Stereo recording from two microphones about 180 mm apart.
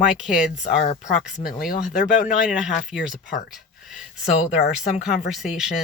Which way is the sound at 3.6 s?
Centre (ahead or behind).